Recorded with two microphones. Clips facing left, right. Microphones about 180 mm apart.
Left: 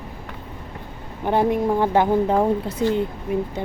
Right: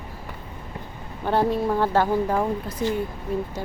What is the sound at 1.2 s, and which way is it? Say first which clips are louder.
A woman's voice: left 2 dB; 15° left (ahead or behind).